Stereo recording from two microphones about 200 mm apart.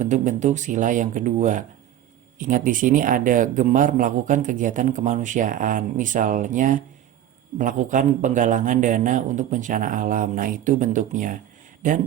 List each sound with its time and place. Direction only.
0.0 s speech: 40° right (ahead or behind)